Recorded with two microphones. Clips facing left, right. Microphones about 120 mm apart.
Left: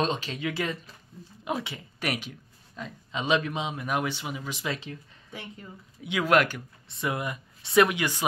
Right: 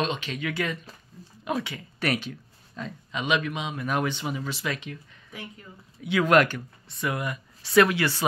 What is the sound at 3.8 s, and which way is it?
Speech, 10° left (ahead or behind).